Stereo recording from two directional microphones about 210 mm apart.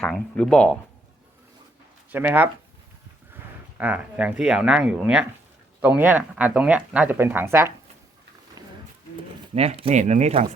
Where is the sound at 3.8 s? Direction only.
5° right (ahead or behind).